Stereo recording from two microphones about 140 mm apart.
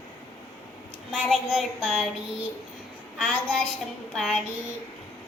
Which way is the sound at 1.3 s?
Centre (ahead or behind).